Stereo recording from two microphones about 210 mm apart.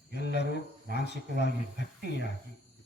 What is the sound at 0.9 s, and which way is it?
Speech, 55° left (ahead or behind).